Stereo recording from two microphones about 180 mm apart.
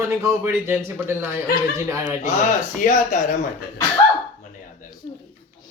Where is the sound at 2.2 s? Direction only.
45° left (ahead or behind).